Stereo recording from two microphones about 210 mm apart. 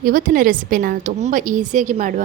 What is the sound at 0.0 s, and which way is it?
A woman's voice, 45° right (ahead or behind).